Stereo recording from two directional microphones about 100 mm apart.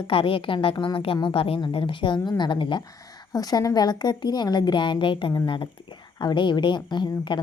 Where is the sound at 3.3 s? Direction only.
40° left (ahead or behind).